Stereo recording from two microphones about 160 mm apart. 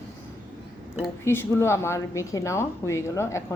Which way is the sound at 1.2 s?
15° left (ahead or behind).